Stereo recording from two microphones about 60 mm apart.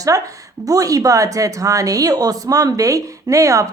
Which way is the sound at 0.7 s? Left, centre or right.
Right.